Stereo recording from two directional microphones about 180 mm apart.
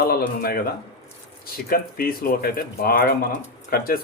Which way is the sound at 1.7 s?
55° left (ahead or behind).